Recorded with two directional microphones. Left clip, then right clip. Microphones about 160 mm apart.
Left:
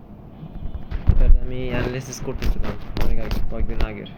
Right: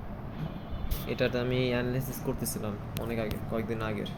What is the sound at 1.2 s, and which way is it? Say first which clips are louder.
Speech: right 6 dB; 20° right (ahead or behind).